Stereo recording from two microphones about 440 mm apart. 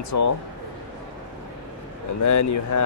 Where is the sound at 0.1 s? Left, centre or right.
Left.